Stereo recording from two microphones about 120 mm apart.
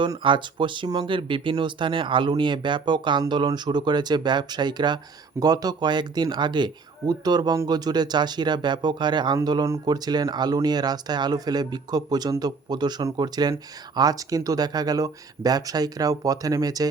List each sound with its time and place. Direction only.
0.0 s speech: 40° right (ahead or behind)